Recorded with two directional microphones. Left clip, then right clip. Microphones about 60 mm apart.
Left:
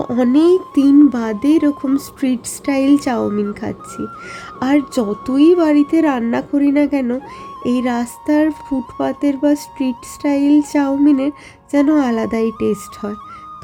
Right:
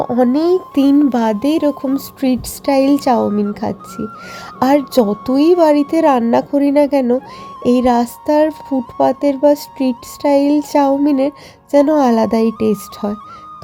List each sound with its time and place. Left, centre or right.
0.0 s speech: centre
0.7 s a child's voice: right
1.4 s music: right
2.2 s a woman's voice: right
4.6 s music: right
5.2 s speech: right
7.6 s music: right